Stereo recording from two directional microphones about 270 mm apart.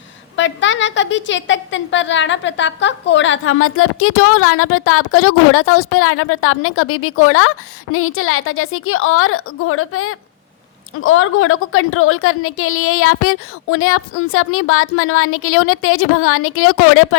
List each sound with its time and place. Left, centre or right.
0.3 s a woman's voice: left